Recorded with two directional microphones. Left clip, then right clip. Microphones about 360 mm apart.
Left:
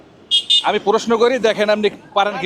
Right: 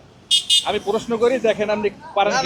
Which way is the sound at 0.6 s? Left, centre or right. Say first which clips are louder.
Left 6 dB; left.